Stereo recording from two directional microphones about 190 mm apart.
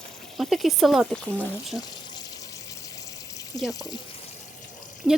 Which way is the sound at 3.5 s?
20° left (ahead or behind).